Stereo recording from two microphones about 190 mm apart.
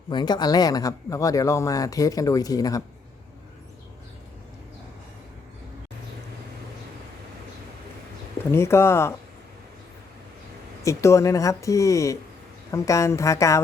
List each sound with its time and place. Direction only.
0.1 s speech: 25° left (ahead or behind)
8.4 s speech: 15° left (ahead or behind)
10.8 s speech: 15° left (ahead or behind)